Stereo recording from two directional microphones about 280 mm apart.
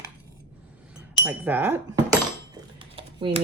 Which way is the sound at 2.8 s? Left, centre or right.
Centre.